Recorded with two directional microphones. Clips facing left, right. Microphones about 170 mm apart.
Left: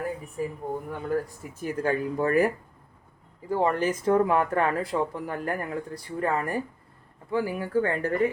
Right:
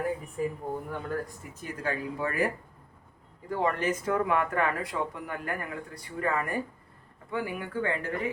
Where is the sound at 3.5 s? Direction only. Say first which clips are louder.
Left 4 dB; 30° left (ahead or behind).